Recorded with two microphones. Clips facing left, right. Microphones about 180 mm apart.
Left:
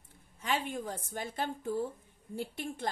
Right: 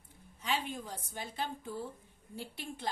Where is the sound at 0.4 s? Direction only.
50° left (ahead or behind).